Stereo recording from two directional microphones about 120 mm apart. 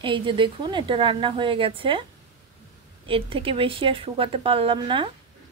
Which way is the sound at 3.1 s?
50° right (ahead or behind).